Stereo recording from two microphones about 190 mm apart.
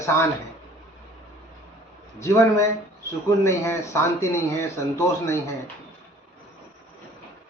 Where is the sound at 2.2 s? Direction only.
15° left (ahead or behind).